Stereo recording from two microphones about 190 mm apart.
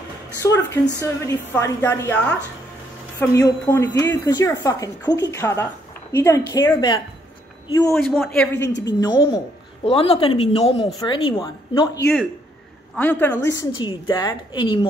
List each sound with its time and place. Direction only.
0.4 s a woman's voice: 15° left (ahead or behind)
7.9 s a man's voice: centre (ahead or behind)
8.6 s a woman's voice: 70° left (ahead or behind)
9.0 s a woman's voice: 25° left (ahead or behind)
12.9 s a woman's voice: 10° left (ahead or behind)
13.7 s a woman's voice: 25° left (ahead or behind)